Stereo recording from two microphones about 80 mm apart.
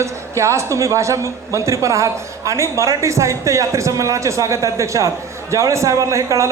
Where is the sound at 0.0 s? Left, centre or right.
Right.